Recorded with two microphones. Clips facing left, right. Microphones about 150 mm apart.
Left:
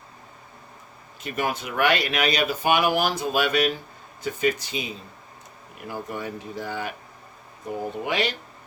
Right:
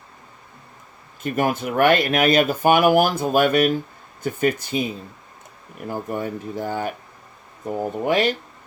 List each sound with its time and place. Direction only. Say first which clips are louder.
1.2 s speech: right 6 dB; 45° right (ahead or behind)
5.9 s speech: right 5 dB; 45° right (ahead or behind)
8.0 s speech: right 7 dB; 45° right (ahead or behind)